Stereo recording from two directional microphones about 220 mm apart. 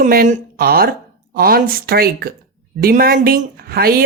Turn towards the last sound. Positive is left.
turn(degrees=-45)  # may be behind; listen again after turning